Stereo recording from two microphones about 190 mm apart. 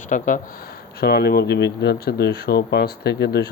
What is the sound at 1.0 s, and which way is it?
Speech, 55° left (ahead or behind).